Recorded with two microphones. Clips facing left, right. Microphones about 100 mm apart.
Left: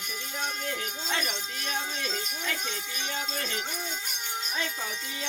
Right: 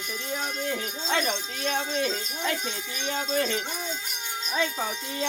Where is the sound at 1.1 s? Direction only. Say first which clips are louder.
Right 7 dB; 35° right (ahead or behind).